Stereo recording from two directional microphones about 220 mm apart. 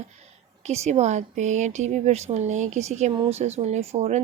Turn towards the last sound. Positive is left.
turn(degrees=-30)  # may be behind; listen again after turning